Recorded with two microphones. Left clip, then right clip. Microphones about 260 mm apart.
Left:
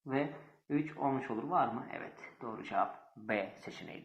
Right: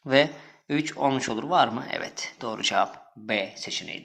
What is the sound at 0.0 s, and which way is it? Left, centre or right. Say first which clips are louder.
Speech: right 15 dB; right.